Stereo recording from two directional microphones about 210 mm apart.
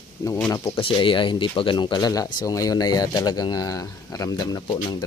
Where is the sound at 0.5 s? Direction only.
20° left (ahead or behind).